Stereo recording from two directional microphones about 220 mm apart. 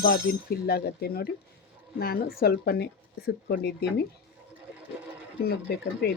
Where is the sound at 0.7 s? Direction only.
45° left (ahead or behind).